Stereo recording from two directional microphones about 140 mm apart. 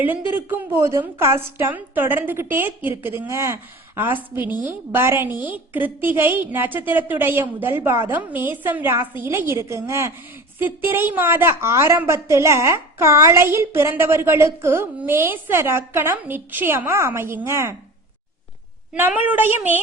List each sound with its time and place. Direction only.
0.5 s a woman's voice: 20° right (ahead or behind)
18.9 s a woman's voice: 15° right (ahead or behind)